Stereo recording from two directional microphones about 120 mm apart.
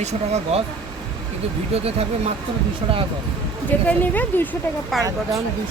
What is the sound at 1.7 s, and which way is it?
Speech, 55° right (ahead or behind).